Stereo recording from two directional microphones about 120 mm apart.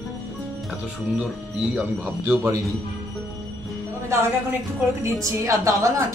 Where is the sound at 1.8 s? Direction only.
15° right (ahead or behind).